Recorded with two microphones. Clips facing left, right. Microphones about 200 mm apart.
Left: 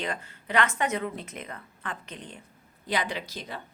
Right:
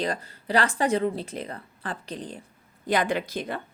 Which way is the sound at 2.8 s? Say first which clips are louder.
Right 6 dB; 50° right (ahead or behind).